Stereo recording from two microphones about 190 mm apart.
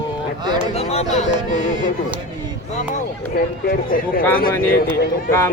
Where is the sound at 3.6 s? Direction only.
50° left (ahead or behind).